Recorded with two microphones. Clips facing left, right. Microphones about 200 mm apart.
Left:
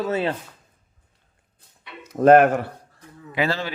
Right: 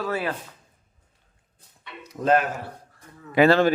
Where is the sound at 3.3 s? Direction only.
55° right (ahead or behind).